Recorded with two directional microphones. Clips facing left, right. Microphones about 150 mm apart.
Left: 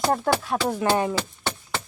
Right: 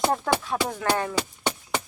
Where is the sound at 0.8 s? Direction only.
15° left (ahead or behind).